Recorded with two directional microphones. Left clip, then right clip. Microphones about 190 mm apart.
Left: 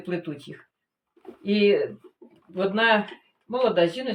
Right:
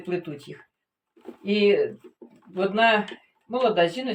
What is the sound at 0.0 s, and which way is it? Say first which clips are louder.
Speech: right 1 dB; 10° left (ahead or behind).